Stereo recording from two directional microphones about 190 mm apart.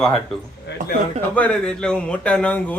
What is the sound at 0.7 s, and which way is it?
Speech, 65° left (ahead or behind).